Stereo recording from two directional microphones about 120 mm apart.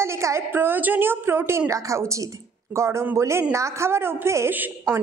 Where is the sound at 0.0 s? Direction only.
25° right (ahead or behind).